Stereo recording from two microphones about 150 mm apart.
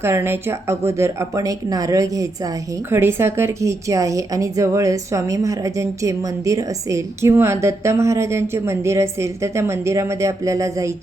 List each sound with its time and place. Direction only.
0.0 s a woman's voice: 15° right (ahead or behind)